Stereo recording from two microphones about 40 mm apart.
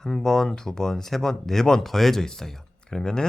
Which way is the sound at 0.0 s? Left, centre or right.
Centre.